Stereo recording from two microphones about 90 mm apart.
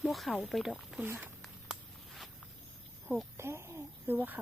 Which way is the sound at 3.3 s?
25° right (ahead or behind).